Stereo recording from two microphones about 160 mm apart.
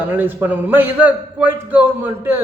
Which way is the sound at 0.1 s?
10° right (ahead or behind).